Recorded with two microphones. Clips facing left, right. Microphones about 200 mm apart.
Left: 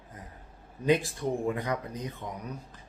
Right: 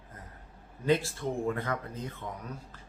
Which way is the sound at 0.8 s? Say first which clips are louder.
Left 2 dB; 15° left (ahead or behind).